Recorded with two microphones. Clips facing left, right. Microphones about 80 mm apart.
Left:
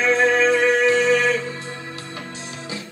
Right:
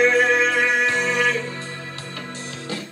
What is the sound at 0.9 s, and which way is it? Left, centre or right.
Music, right.